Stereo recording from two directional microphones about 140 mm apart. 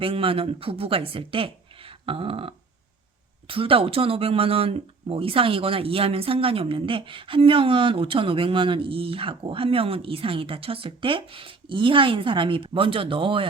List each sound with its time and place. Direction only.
0.0 s speech: 40° right (ahead or behind)